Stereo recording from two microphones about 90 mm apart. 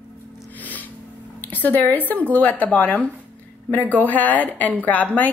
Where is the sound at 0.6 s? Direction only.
20° left (ahead or behind).